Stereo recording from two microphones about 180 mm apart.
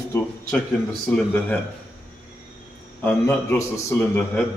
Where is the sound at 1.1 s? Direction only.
10° left (ahead or behind).